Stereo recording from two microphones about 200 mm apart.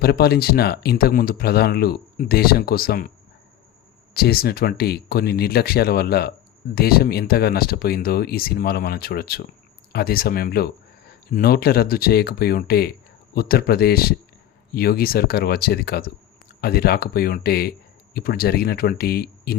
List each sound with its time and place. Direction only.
0.0 s speech: 50° left (ahead or behind)
4.1 s speech: 50° left (ahead or behind)